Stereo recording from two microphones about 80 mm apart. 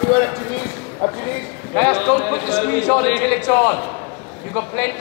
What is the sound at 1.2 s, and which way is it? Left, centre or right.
A man's voice, centre.